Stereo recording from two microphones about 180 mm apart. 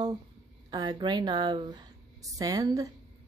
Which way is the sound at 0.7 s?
25° right (ahead or behind).